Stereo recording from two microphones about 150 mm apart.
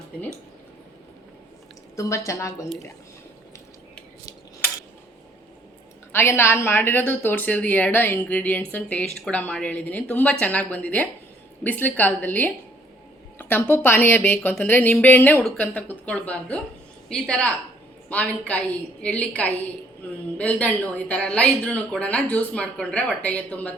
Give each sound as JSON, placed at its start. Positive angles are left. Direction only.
{"t": 2.0, "sound": "a woman's voice", "side_deg": 20}
{"t": 6.1, "sound": "a woman's voice", "side_deg": 15}